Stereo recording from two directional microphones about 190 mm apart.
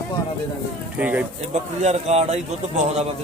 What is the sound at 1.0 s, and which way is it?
Speech, 5° right (ahead or behind).